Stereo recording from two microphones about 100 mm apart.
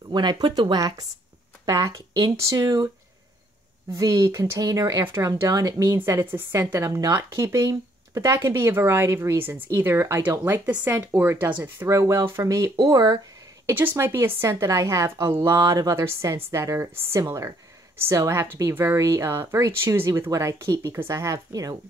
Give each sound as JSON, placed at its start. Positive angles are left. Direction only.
{"t": 0.1, "sound": "speech", "side_deg": -50}
{"t": 3.9, "sound": "speech", "side_deg": -35}
{"t": 5.0, "sound": "speech", "side_deg": -25}
{"t": 5.9, "sound": "speech", "side_deg": -20}
{"t": 6.7, "sound": "speech", "side_deg": -35}
{"t": 12.0, "sound": "speech", "side_deg": -30}
{"t": 13.9, "sound": "speech", "side_deg": -25}